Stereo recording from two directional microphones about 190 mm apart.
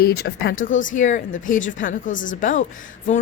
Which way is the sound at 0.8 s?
40° left (ahead or behind).